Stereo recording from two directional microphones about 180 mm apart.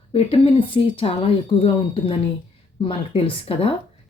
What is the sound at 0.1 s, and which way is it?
Speech, 30° left (ahead or behind).